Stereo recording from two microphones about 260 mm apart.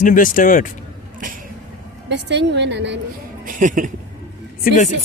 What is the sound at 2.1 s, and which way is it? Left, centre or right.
Speech, right.